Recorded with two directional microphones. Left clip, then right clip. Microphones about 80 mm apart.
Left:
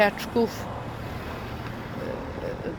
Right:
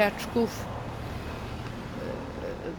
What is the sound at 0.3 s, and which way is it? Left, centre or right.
Speech, centre.